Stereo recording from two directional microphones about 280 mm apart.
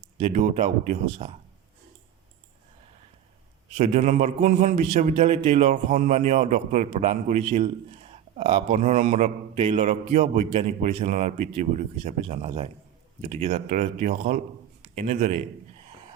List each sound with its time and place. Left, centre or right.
0.2 s a man's voice: right
3.8 s a man's voice: right